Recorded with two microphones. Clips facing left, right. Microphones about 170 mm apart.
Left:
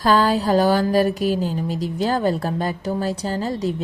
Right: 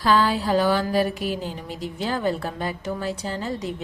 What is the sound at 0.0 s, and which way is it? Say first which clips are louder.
Speech: left 3 dB; 40° left (ahead or behind).